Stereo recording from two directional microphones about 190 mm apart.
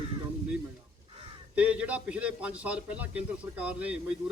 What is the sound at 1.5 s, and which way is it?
A man's voice, 5° right (ahead or behind).